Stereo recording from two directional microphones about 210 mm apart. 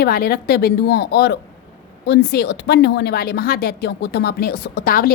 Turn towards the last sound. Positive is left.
turn(degrees=45)  # may be behind; listen again after turning